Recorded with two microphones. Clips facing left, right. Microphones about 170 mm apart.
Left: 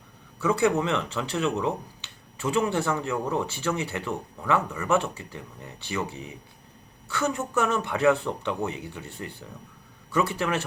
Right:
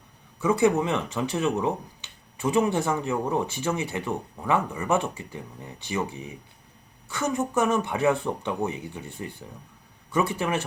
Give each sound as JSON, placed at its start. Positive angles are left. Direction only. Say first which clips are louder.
{"t": 0.4, "sound": "speech", "louder": "right 2 dB", "side_deg": -15}